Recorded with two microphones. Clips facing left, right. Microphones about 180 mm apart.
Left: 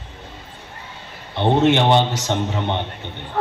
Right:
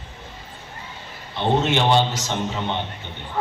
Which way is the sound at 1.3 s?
60° left (ahead or behind).